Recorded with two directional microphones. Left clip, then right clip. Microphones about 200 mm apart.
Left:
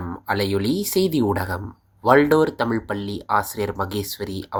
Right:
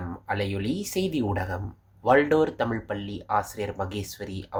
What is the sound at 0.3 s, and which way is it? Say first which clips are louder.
Speech: left 7 dB; 25° left (ahead or behind).